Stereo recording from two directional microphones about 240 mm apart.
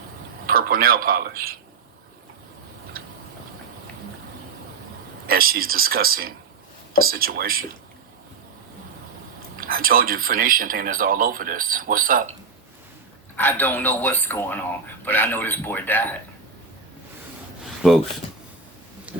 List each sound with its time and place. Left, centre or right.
0.4 s speech: right
5.3 s speech: right
9.6 s speech: right
13.3 s speech: centre